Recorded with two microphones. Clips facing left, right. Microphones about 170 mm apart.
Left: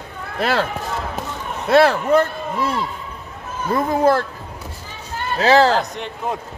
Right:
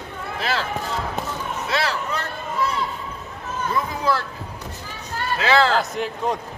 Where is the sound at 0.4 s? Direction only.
55° left (ahead or behind).